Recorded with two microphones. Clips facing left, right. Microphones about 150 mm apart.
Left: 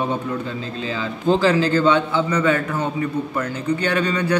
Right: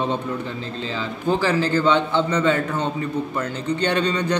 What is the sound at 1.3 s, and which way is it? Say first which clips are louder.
Speech: left 3 dB; 10° right (ahead or behind).